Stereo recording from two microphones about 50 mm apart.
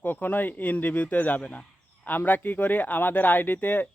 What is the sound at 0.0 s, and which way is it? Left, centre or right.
Speech, left.